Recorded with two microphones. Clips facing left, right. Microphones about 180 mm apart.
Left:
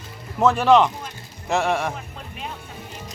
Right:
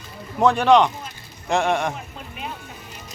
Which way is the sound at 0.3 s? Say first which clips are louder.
Even; centre (ahead or behind).